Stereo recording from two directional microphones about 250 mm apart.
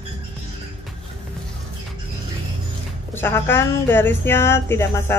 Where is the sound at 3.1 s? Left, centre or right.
Centre.